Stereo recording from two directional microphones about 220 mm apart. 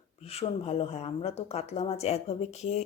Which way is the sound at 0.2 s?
30° left (ahead or behind).